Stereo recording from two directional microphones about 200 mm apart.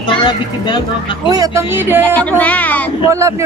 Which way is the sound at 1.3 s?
15° right (ahead or behind).